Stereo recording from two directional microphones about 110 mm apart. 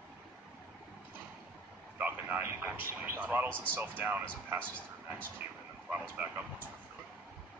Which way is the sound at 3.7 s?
15° right (ahead or behind).